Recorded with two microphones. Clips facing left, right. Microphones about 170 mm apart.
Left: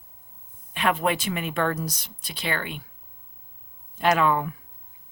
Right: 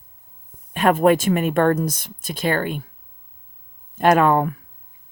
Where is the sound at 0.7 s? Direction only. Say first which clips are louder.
Right 9 dB; 45° right (ahead or behind).